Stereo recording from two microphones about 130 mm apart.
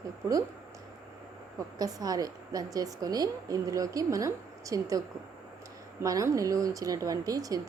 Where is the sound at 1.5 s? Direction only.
30° right (ahead or behind).